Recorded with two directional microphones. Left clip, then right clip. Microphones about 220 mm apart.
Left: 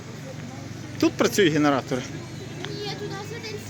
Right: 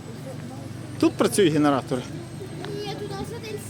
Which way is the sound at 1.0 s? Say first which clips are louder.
Even; 10° right (ahead or behind).